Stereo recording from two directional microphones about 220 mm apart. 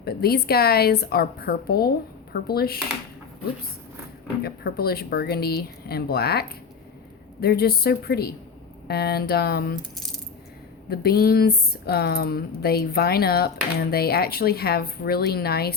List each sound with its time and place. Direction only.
0.0 s speech: 45° left (ahead or behind)
4.4 s speech: 45° left (ahead or behind)
7.4 s speech: 45° left (ahead or behind)
10.8 s speech: 45° left (ahead or behind)